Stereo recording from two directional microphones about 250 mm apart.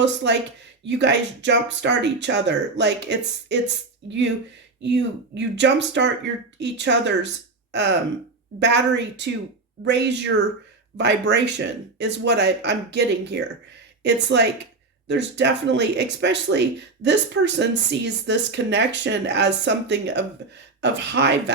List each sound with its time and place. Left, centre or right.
0.0 s speech: right
4.8 s speech: right